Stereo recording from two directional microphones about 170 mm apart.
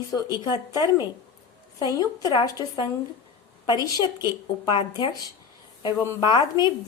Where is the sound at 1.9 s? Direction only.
25° left (ahead or behind).